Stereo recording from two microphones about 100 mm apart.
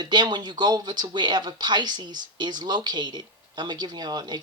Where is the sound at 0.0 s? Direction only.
45° right (ahead or behind).